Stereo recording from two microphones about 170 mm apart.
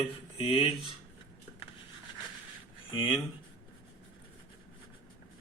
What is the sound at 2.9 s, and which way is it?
Speech, 30° left (ahead or behind).